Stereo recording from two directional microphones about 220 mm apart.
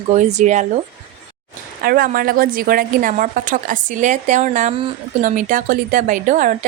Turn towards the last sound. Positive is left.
turn(degrees=-35)  # may be behind; listen again after turning